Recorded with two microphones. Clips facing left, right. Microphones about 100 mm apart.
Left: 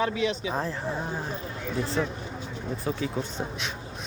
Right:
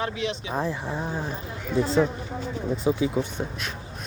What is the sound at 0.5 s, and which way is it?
Speech, 10° right (ahead or behind).